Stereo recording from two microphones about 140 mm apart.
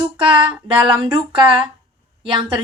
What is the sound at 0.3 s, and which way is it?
Speech, 40° right (ahead or behind).